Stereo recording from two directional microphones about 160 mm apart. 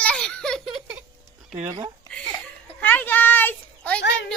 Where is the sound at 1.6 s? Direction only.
20° right (ahead or behind).